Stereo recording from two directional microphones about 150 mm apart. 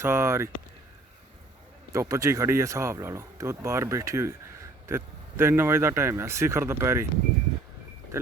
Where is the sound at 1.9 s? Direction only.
20° right (ahead or behind).